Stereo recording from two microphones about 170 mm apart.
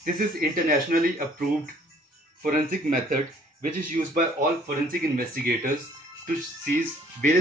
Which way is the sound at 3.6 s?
50° right (ahead or behind).